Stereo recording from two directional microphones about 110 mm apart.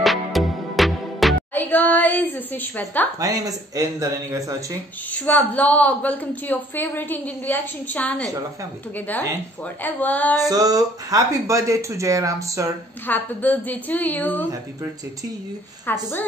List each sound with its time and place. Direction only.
0.0 s music: centre (ahead or behind)
1.5 s child singing: 15° left (ahead or behind)
2.8 s a woman's voice: 15° left (ahead or behind)
3.2 s speech: 35° right (ahead or behind)
5.2 s a woman's voice: 15° left (ahead or behind)
9.8 s a woman's voice: 15° left (ahead or behind)
10.5 s speech: 35° right (ahead or behind)
13.0 s a woman's voice: 15° left (ahead or behind)
15.9 s a woman's voice: 20° left (ahead or behind)